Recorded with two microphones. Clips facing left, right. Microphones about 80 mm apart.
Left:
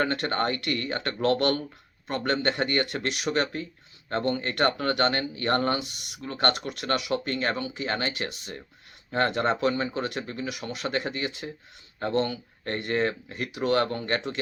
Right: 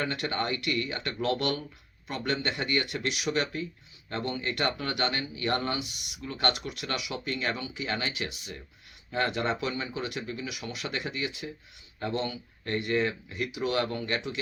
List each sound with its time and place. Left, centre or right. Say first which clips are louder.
0.0 s speech: left 5 dB; left